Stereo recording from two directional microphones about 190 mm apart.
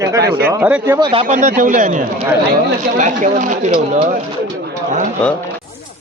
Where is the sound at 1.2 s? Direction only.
45° right (ahead or behind).